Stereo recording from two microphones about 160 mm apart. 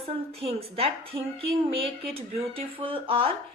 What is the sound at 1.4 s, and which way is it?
Speech, 35° right (ahead or behind).